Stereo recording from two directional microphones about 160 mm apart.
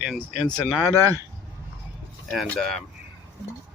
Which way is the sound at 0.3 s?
25° left (ahead or behind).